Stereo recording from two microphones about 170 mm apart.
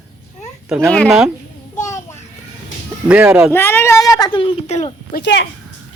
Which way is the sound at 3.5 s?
15° left (ahead or behind).